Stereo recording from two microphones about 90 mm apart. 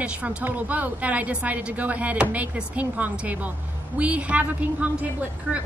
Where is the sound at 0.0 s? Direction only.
15° right (ahead or behind).